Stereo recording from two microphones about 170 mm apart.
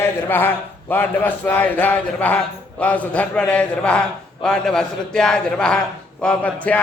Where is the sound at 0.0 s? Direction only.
10° left (ahead or behind).